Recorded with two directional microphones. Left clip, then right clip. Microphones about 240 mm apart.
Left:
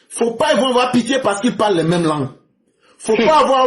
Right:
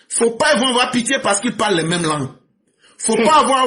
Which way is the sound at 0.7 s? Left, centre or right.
Right.